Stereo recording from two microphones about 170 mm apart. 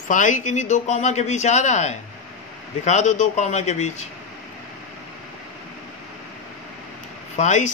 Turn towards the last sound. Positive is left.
turn(degrees=45)  # may be behind; listen again after turning